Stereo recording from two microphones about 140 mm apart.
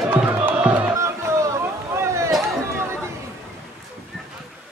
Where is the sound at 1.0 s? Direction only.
20° right (ahead or behind).